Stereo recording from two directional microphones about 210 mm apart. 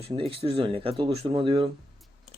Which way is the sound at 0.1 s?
25° right (ahead or behind).